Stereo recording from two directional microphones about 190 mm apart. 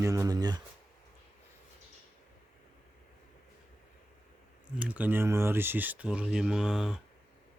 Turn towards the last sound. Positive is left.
turn(degrees=-5)  # may be behind; listen again after turning